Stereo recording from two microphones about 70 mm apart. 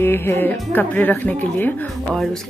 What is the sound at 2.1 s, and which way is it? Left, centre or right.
Speech, centre.